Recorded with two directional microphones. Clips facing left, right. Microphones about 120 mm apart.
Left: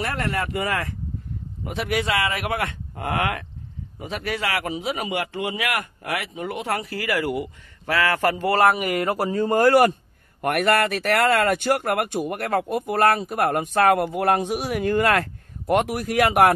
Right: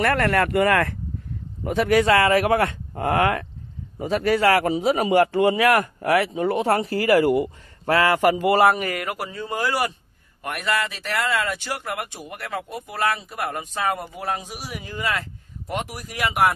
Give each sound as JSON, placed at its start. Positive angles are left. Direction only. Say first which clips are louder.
{"t": 0.0, "sound": "speech", "louder": "right 6 dB", "side_deg": -60}
{"t": 1.6, "sound": "a man's voice", "louder": "right 7 dB", "side_deg": -40}
{"t": 8.9, "sound": "speech", "louder": "left 7 dB", "side_deg": 30}